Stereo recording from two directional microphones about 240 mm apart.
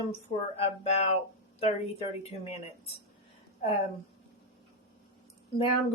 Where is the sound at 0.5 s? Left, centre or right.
Left.